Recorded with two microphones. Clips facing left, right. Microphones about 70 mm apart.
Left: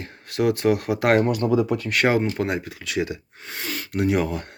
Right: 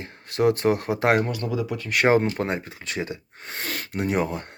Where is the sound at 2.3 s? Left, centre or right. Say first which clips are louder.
Left 2 dB; right.